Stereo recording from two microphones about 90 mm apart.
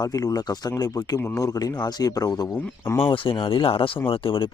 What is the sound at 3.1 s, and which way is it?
Speech, 75° left (ahead or behind).